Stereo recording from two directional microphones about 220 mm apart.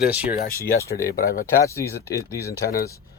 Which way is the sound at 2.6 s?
40° left (ahead or behind).